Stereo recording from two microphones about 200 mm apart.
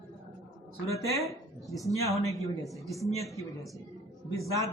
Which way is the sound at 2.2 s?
15° left (ahead or behind).